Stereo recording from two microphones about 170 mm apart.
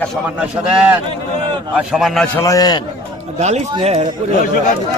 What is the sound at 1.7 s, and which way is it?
Speech, centre (ahead or behind).